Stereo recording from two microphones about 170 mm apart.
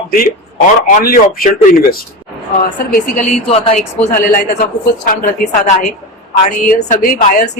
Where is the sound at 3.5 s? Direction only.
35° left (ahead or behind).